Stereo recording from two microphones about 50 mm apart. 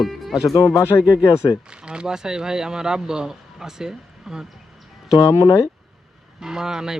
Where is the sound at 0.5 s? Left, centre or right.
Left.